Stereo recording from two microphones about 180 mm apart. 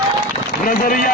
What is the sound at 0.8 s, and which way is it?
Speech, 50° left (ahead or behind).